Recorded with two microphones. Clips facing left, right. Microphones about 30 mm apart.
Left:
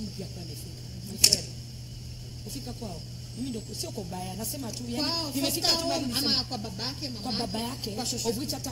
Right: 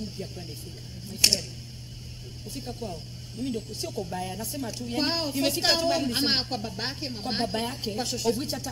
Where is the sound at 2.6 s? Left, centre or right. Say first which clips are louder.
Right 4 dB; centre.